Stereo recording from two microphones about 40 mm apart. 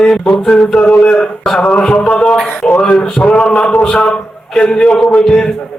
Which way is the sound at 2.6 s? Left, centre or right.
Centre.